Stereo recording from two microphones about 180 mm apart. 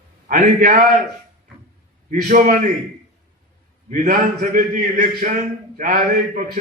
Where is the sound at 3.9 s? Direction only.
50° right (ahead or behind).